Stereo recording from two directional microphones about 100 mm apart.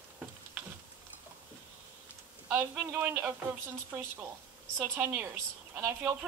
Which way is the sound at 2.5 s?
15° right (ahead or behind).